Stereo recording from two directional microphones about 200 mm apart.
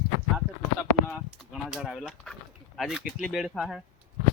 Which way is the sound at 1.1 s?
Centre (ahead or behind).